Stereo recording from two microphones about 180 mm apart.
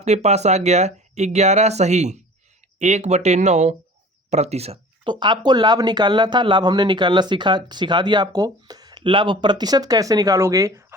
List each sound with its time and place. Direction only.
0.0 s speech: 40° right (ahead or behind)
5.2 s speech: 25° right (ahead or behind)